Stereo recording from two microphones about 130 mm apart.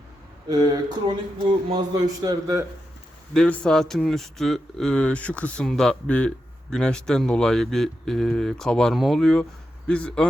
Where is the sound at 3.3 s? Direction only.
5° left (ahead or behind).